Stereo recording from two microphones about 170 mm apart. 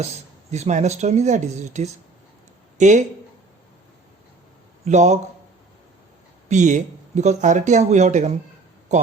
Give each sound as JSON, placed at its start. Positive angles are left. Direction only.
{"t": 0.0, "sound": "speech", "side_deg": -40}
{"t": 4.9, "sound": "speech", "side_deg": -45}
{"t": 6.5, "sound": "speech", "side_deg": -45}